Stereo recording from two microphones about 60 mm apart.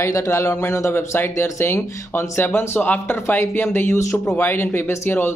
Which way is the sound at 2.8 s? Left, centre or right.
Left.